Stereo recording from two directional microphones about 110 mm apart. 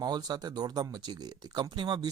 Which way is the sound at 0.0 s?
40° right (ahead or behind).